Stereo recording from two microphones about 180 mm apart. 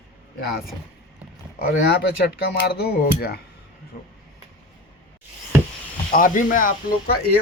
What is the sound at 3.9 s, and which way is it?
Speech, 45° left (ahead or behind).